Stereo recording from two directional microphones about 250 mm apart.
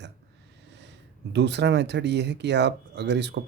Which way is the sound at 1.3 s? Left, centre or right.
Right.